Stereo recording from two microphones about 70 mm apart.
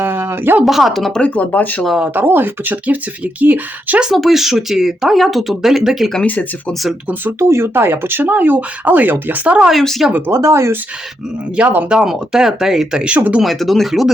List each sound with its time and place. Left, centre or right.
0.0 s a sound: right
0.6 s speech: centre
1.2 s speech: left
2.1 s speech: right
4.0 s speech: centre
6.2 s speech: left
7.3 s speech: right; by 9.6 s centre
9.8 s speech: centre
10.1 s speech: right
10.3 s speech: right
11.9 s speech: centre
13.4 s speech: centre